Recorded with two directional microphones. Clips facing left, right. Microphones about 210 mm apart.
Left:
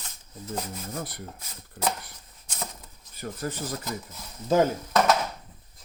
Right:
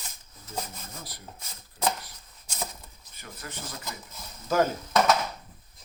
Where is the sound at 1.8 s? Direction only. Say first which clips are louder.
Even; 55° left (ahead or behind).